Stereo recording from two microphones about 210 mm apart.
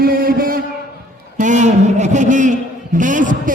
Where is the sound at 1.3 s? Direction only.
35° right (ahead or behind).